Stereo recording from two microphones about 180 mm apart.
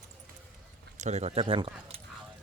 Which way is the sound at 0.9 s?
40° right (ahead or behind).